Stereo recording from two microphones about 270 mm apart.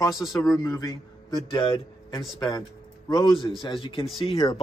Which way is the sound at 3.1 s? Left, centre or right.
Centre.